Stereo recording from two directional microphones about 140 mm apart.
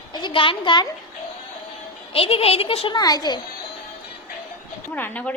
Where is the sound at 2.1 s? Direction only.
45° left (ahead or behind).